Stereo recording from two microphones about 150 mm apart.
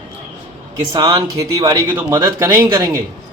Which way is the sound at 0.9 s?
25° right (ahead or behind).